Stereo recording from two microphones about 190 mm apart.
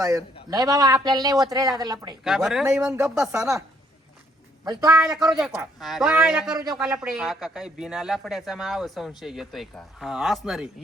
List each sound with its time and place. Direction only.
0.0 s speech: 15° right (ahead or behind)
2.2 s speech: centre (ahead or behind)
4.6 s a man's voice: 20° right (ahead or behind)
5.1 s speech: centre (ahead or behind)